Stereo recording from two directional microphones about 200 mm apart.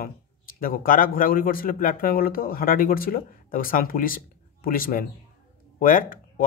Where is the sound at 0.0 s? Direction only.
45° left (ahead or behind).